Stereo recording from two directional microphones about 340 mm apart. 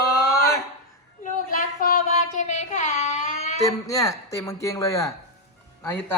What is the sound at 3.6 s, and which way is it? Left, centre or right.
Speech, centre.